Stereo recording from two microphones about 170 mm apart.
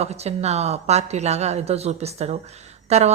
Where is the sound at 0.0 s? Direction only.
40° right (ahead or behind).